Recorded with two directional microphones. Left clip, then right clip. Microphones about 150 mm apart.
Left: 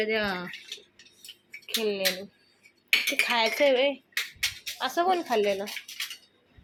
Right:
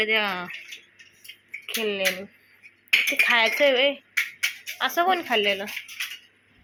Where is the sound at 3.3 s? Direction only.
20° left (ahead or behind).